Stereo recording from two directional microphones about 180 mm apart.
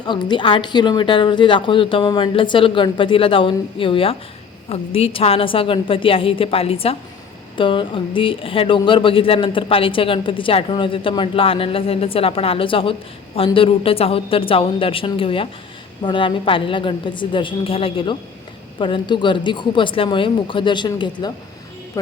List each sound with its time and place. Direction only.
0.0 s a woman's voice: 25° left (ahead or behind)